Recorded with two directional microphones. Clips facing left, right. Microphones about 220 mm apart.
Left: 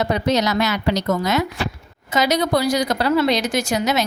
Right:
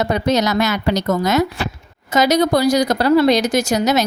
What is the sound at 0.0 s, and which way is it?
Speech, 45° right (ahead or behind).